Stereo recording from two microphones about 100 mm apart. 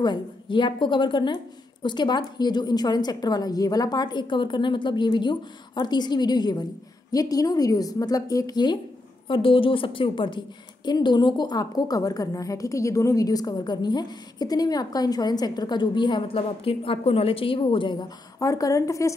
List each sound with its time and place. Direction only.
0.0 s a woman's voice: 50° left (ahead or behind)
9.3 s a woman's voice: 60° left (ahead or behind)
18.4 s a woman's voice: 35° left (ahead or behind)